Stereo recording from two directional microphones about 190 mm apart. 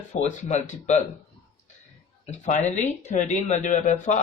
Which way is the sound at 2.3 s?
35° left (ahead or behind).